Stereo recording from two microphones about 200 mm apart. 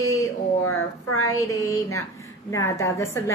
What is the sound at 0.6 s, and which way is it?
Speech, 90° left.